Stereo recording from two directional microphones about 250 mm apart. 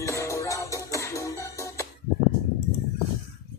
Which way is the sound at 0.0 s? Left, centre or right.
Centre.